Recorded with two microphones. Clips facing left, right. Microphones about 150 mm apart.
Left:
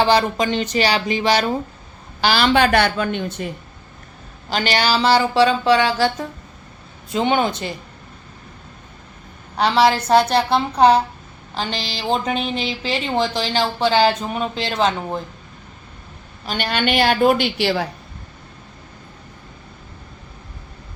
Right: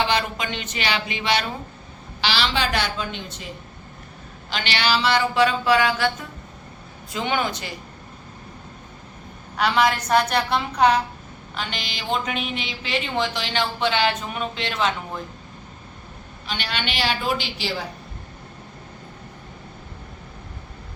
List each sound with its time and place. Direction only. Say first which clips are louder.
0.0 s a woman's voice: left 7 dB; 35° left (ahead or behind)
2.2 s a woman's voice: left 8 dB; 50° left (ahead or behind)
4.4 s a woman's voice: left 5 dB; 40° left (ahead or behind); by 7.7 s 25° left (ahead or behind)
9.6 s a woman's voice: left 4 dB; 30° left (ahead or behind)
16.5 s a woman's voice: left 8 dB; 50° left (ahead or behind); by 17.8 s 65° left (ahead or behind)